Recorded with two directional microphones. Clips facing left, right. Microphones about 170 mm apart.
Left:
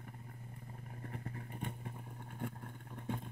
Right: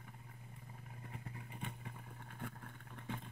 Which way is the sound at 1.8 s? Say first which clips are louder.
Left 4 dB; 30° left (ahead or behind).